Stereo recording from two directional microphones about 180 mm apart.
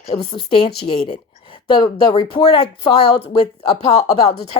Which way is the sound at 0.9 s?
60° left (ahead or behind).